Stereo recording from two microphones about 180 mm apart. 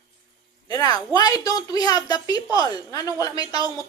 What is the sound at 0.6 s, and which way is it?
A woman's voice, 20° left (ahead or behind).